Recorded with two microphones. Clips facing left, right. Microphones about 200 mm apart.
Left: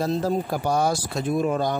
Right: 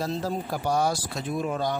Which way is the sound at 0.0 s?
50° left (ahead or behind).